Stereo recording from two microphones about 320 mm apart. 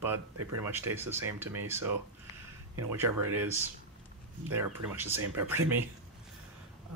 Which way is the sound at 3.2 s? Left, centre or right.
Right.